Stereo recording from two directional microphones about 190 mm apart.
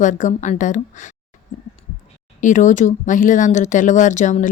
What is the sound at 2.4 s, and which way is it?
Speech, 40° left (ahead or behind).